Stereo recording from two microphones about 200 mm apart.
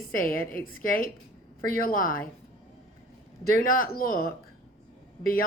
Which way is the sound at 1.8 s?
45° left (ahead or behind).